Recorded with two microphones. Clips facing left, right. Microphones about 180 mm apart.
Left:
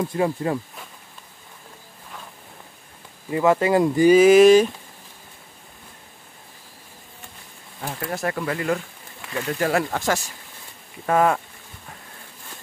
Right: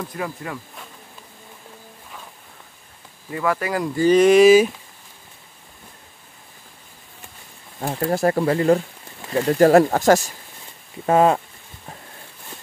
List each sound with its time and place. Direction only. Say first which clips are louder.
0.0 s speech: left 7 dB; 25° left (ahead or behind)
3.3 s speech: left 5 dB; 25° left (ahead or behind)
4.1 s speech: even; 5° left (ahead or behind)
7.8 s speech: right 7 dB; 30° right (ahead or behind)
11.1 s speech: right 3 dB; 25° right (ahead or behind)